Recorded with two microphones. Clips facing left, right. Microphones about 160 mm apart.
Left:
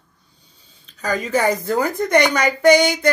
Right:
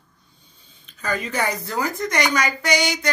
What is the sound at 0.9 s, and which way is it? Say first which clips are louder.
A woman's voice: left 5 dB; 40° left (ahead or behind).